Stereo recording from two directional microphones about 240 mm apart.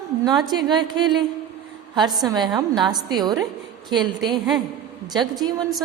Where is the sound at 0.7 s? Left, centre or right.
Centre.